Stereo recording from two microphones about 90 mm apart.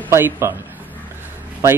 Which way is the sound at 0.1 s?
30° right (ahead or behind).